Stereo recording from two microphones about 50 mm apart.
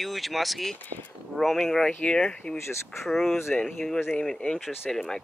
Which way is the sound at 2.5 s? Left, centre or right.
Left.